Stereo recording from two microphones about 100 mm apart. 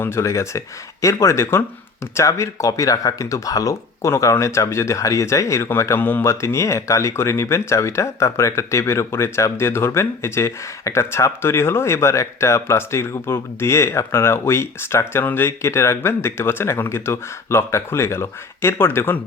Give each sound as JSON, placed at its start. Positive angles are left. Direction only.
{"t": 0.0, "sound": "speech", "side_deg": 25}